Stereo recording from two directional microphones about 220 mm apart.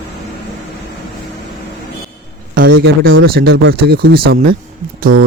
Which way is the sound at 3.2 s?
45° right (ahead or behind).